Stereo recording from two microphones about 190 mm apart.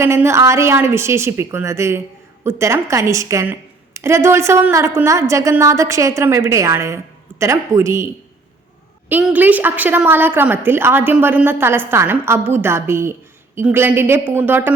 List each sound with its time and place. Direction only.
0.0 s a woman's voice: 15° right (ahead or behind)